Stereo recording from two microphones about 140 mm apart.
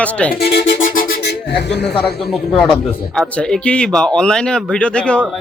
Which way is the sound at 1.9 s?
Centre (ahead or behind).